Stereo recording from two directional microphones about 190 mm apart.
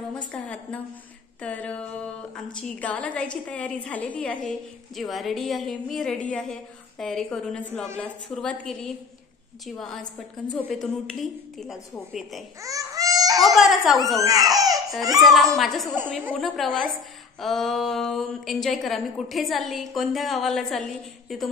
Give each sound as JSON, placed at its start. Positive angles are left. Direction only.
{"t": 0.3, "sound": "a woman's voice", "side_deg": 5}
{"t": 12.6, "sound": "baby cry", "side_deg": -20}
{"t": 13.4, "sound": "speech", "side_deg": 0}
{"t": 14.2, "sound": "speech", "side_deg": -20}
{"t": 15.1, "sound": "a woman's voice", "side_deg": 0}